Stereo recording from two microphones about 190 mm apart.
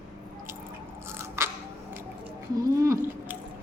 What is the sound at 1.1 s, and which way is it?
Biting, 15° right (ahead or behind).